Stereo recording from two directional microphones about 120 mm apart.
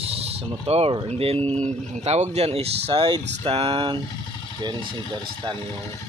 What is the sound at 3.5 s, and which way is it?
Speech, 50° right (ahead or behind).